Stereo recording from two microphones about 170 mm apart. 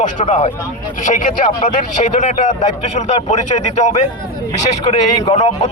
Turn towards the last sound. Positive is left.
turn(degrees=40)  # may be behind; listen again after turning